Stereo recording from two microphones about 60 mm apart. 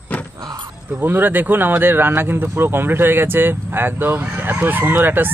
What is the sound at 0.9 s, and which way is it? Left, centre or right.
Speech, right.